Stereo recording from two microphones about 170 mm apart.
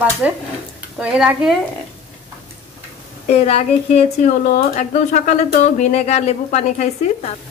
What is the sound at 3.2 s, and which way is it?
A woman's voice, 35° left (ahead or behind).